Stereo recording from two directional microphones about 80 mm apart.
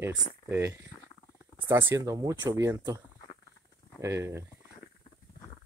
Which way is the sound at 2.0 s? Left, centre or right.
Right.